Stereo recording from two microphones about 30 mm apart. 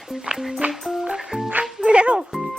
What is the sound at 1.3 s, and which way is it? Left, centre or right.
Music, right.